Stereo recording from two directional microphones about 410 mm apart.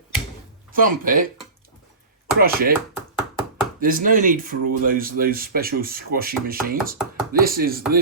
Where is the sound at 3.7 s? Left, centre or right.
Centre.